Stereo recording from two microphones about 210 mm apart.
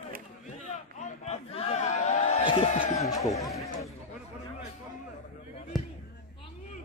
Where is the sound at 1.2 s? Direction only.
30° left (ahead or behind).